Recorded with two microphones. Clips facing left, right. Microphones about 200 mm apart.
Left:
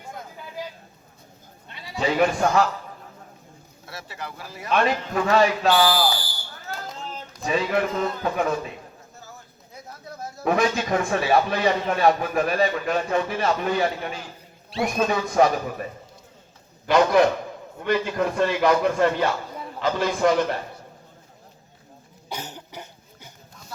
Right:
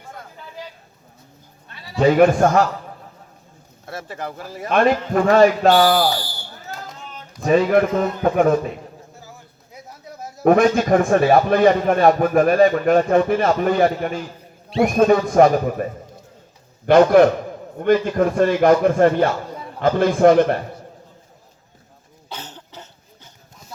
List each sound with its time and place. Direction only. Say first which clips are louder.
1.6 s bleat: even; 20° left (ahead or behind)
2.0 s a man's voice: right 8 dB; 50° right (ahead or behind)
3.8 s a man's voice: right 7 dB; 50° right (ahead or behind)
7.4 s a man's voice: right 8 dB; 50° right (ahead or behind)
10.4 s a man's voice: right 8 dB; 50° right (ahead or behind)
22.3 s cough: left 1 dB; 10° left (ahead or behind)